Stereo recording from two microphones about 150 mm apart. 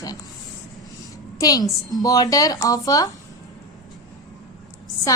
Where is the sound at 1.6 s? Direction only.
Centre (ahead or behind).